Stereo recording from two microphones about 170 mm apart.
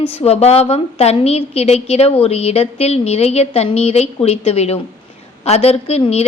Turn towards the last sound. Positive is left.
turn(degrees=40)  # may be behind; listen again after turning